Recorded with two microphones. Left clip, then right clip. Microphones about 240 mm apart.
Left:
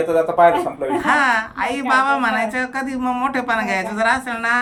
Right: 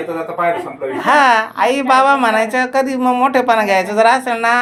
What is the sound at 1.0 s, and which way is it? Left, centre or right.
A woman's voice, centre.